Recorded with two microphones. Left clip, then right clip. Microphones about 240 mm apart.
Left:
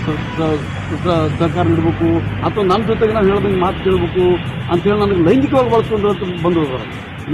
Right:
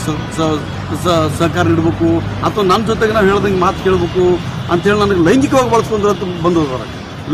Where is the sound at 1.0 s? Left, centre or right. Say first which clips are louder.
Right 3 dB; right.